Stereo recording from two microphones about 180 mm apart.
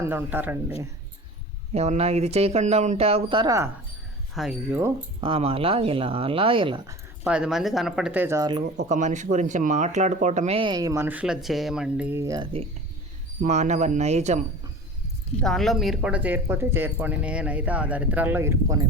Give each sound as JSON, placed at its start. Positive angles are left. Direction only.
{"t": 0.0, "sound": "speech", "side_deg": -10}
{"t": 1.7, "sound": "speech", "side_deg": -35}
{"t": 4.4, "sound": "speech", "side_deg": 0}
{"t": 5.2, "sound": "speech", "side_deg": -30}
{"t": 7.3, "sound": "speech", "side_deg": -5}
{"t": 8.8, "sound": "speech", "side_deg": -40}
{"t": 13.4, "sound": "speech", "side_deg": -40}
{"t": 15.4, "sound": "speech", "side_deg": 0}